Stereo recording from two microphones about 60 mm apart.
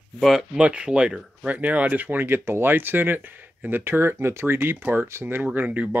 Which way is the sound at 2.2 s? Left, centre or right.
Right.